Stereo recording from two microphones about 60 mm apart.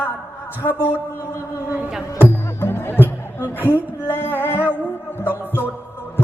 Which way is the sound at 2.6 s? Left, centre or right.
Left.